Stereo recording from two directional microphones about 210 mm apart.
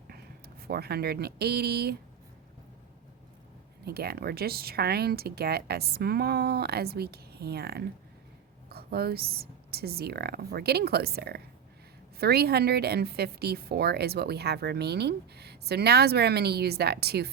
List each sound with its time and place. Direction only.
0.1 s speech: 45° right (ahead or behind)
3.8 s a woman's voice: 50° right (ahead or behind)